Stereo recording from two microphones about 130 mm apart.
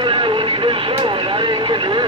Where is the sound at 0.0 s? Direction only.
40° right (ahead or behind).